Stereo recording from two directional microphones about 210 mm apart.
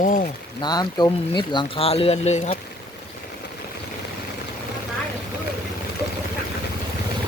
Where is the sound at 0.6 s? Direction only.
20° left (ahead or behind).